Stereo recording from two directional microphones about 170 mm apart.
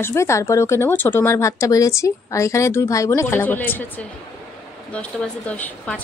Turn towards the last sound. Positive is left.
turn(degrees=10)  # may be behind; listen again after turning